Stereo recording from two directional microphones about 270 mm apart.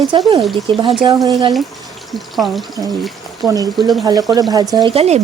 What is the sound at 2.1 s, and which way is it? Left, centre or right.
Speech, centre.